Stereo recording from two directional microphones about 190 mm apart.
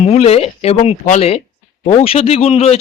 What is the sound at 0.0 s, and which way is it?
A man's voice, 35° left (ahead or behind).